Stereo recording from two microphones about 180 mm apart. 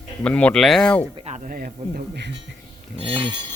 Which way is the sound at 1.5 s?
55° right (ahead or behind).